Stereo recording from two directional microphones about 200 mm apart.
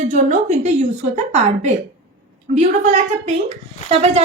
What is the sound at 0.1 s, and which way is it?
Speech, 35° right (ahead or behind).